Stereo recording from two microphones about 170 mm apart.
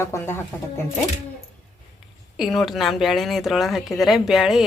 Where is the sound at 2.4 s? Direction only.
Centre (ahead or behind).